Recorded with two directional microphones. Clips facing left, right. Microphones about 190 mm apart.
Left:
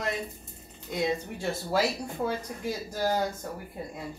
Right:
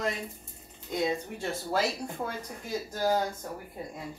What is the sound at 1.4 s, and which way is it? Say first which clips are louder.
Speech: left 2 dB; 10° left (ahead or behind).